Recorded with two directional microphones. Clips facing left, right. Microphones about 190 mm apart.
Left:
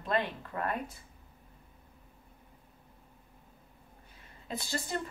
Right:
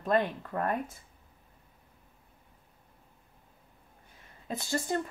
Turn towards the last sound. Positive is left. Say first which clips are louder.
# right 4 dB
turn(degrees=-50)  # may be behind; listen again after turning